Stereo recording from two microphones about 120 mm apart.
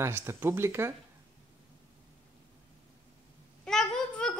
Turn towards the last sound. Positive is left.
turn(degrees=5)  # may be behind; listen again after turning